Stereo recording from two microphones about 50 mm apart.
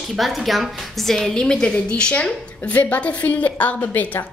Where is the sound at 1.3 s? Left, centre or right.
Centre; by 3.9 s left.